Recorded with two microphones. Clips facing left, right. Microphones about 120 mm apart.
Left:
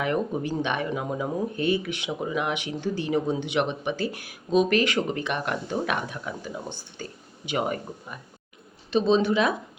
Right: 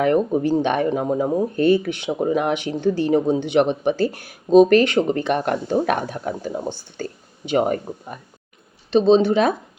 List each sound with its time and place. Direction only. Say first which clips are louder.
0.0 s speech: right 8 dB; 40° right (ahead or behind)